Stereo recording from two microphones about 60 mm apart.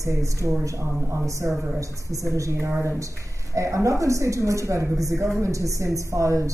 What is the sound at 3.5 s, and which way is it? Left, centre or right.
Speech, right.